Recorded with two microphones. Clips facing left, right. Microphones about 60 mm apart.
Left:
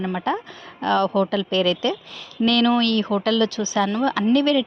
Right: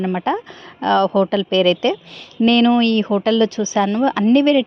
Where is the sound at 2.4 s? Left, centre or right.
Right.